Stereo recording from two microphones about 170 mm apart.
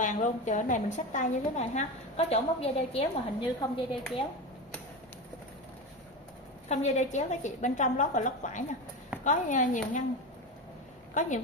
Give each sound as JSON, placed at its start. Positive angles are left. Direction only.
{"t": 0.0, "sound": "a woman's voice", "side_deg": 45}
{"t": 6.7, "sound": "a woman's voice", "side_deg": 45}
{"t": 11.1, "sound": "a woman's voice", "side_deg": 45}